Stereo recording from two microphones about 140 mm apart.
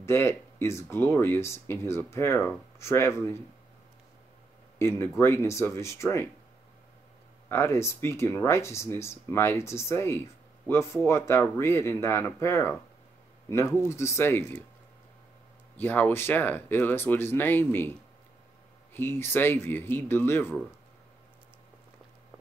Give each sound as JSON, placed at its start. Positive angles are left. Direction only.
{"t": 0.0, "sound": "speech", "side_deg": 20}
{"t": 4.7, "sound": "speech", "side_deg": 20}
{"t": 7.4, "sound": "speech", "side_deg": 20}
{"t": 13.7, "sound": "speech", "side_deg": 20}
{"t": 15.8, "sound": "speech", "side_deg": 15}
{"t": 18.9, "sound": "speech", "side_deg": 15}